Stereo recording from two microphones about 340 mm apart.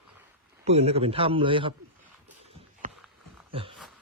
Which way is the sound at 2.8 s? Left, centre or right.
Right.